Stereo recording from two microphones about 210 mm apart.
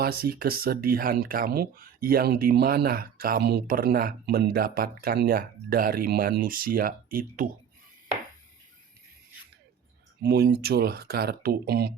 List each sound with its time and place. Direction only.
0.0 s speech: 45° right (ahead or behind)
10.2 s speech: 50° right (ahead or behind)